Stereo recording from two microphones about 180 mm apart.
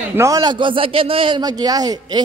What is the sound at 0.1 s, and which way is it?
A man's voice, 15° right (ahead or behind).